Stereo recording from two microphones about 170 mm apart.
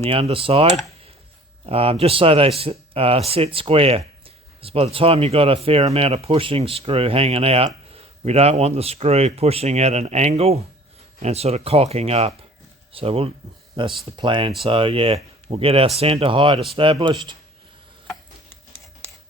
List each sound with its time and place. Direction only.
0.0 s speech: 35° right (ahead or behind)